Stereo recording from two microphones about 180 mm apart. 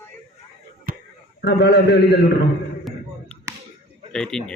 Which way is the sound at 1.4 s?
65° left (ahead or behind).